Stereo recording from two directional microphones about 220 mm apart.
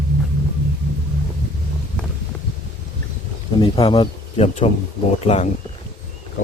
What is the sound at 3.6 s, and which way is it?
Speech, 25° left (ahead or behind).